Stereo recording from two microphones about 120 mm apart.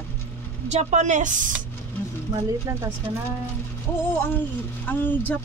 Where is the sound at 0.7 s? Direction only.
75° right (ahead or behind).